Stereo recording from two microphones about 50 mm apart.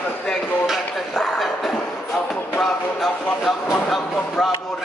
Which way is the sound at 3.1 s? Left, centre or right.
Left.